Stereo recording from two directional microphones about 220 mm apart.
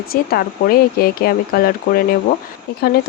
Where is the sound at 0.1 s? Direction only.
45° left (ahead or behind).